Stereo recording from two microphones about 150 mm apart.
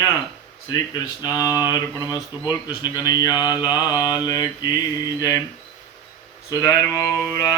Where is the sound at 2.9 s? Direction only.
25° left (ahead or behind).